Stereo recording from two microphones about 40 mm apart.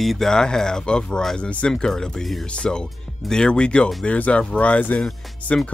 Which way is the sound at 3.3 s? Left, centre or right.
Left.